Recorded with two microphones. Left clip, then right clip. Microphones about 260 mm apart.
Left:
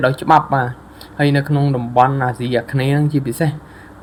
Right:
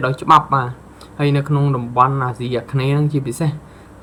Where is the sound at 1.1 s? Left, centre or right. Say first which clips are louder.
Left 2 dB; centre.